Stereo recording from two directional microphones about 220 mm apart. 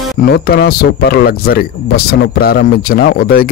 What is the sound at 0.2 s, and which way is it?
Speech, 45° left (ahead or behind).